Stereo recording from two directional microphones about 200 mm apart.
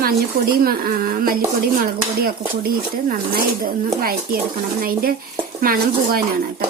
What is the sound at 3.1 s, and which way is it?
Speech, 45° right (ahead or behind).